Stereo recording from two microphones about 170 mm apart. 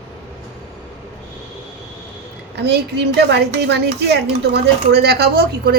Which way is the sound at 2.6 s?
75° right (ahead or behind).